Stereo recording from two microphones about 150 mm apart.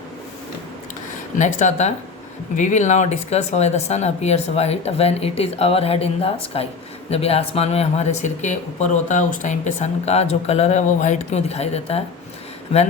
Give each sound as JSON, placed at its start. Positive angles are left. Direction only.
{"t": 1.4, "sound": "speech", "side_deg": 50}